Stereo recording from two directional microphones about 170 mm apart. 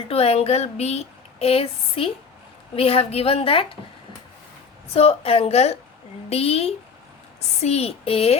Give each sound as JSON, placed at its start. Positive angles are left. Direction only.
{"t": 0.1, "sound": "speech", "side_deg": 35}
{"t": 4.9, "sound": "speech", "side_deg": 35}